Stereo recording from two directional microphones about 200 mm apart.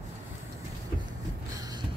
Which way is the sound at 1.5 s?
20° right (ahead or behind).